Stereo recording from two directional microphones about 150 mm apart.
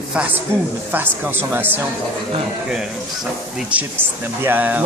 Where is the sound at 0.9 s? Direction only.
15° right (ahead or behind).